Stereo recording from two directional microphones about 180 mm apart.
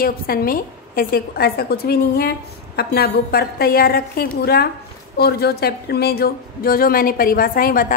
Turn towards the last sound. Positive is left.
turn(degrees=50)  # may be behind; listen again after turning